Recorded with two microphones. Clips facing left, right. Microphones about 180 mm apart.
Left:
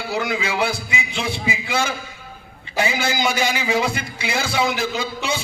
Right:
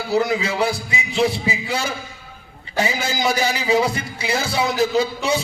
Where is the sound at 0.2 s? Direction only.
35° right (ahead or behind).